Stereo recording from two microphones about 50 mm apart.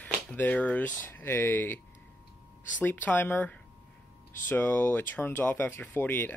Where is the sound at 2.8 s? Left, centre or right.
Left.